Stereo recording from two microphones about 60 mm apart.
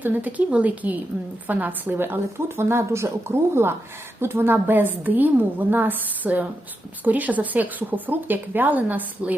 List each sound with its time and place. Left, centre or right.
0.0 s a woman's voice: right